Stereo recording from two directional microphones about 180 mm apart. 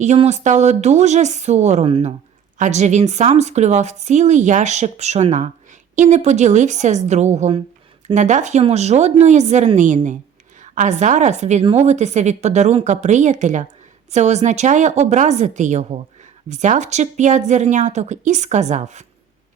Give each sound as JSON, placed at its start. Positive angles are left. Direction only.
{"t": 0.0, "sound": "a woman's voice", "side_deg": -40}